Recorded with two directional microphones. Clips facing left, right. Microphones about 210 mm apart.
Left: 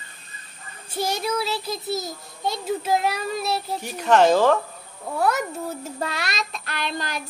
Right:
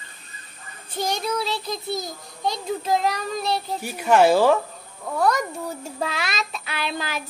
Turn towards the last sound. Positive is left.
turn(degrees=-5)  # may be behind; listen again after turning